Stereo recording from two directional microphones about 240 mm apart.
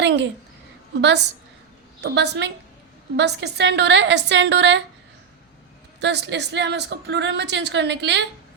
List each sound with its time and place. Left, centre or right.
0.0 s a woman's voice: right
2.0 s a woman's voice: right
6.0 s a woman's voice: right